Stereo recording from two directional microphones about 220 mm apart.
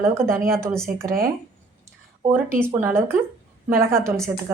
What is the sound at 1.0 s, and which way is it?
Speech, 40° right (ahead or behind).